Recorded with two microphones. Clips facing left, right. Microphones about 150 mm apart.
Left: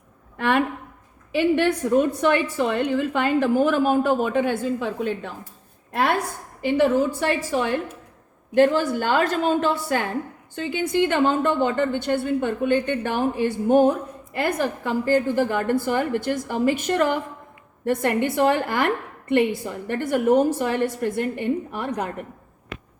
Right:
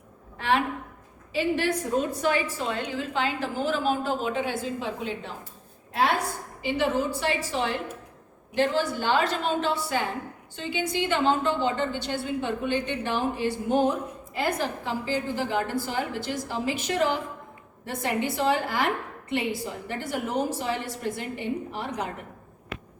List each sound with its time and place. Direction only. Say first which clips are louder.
0.3 s a woman's voice: left 4 dB; 55° left (ahead or behind)